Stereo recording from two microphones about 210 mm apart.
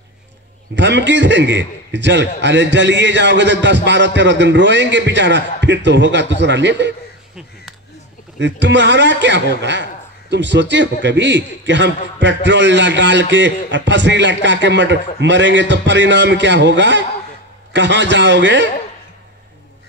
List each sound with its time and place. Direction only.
0.7 s a man's voice: 55° right (ahead or behind)
8.4 s a man's voice: 60° right (ahead or behind)